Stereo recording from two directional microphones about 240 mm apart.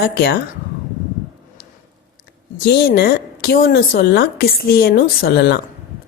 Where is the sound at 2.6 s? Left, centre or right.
Left.